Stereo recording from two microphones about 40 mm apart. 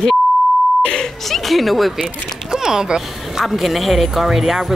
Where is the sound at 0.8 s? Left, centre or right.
Centre.